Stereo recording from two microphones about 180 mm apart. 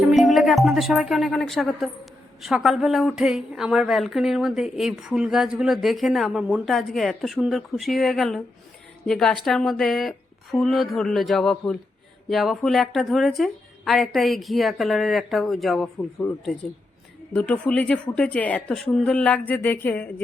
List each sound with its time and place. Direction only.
0.1 s a woman's voice: centre (ahead or behind)
17.3 s a woman's voice: 5° left (ahead or behind)